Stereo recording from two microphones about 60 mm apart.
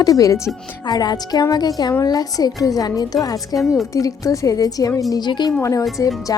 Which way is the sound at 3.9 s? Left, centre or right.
Left.